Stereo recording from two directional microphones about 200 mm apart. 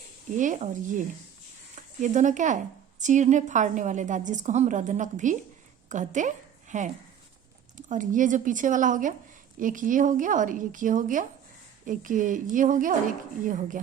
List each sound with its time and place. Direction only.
0.3 s a woman's voice: 40° right (ahead or behind)